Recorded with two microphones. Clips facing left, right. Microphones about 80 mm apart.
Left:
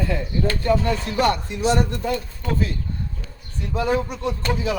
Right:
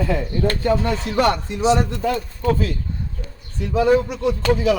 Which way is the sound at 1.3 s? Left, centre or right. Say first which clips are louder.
Right 3 dB; right.